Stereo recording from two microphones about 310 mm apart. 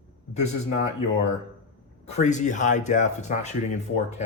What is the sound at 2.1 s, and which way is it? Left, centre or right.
Speech, left.